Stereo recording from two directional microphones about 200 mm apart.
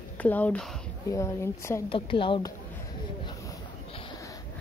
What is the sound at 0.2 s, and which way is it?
Speech, 10° left (ahead or behind).